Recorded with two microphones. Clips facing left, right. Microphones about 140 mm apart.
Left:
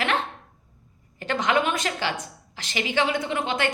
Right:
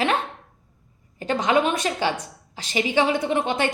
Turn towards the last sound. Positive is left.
turn(degrees=-25)  # may be behind; listen again after turning